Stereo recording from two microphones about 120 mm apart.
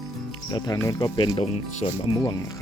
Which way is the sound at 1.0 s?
40° left (ahead or behind).